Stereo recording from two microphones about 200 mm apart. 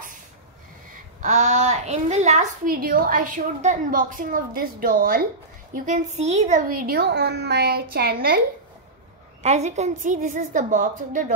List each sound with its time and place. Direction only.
1.2 s a child's voice: 35° right (ahead or behind)
9.4 s a child's voice: 35° right (ahead or behind)